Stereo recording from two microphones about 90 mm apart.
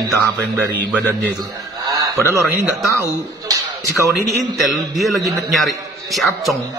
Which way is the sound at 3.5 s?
40° right (ahead or behind).